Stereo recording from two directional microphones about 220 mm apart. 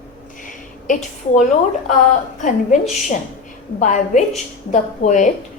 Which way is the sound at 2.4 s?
35° left (ahead or behind).